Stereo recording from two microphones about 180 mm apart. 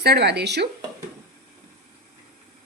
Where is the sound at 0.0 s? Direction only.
65° right (ahead or behind).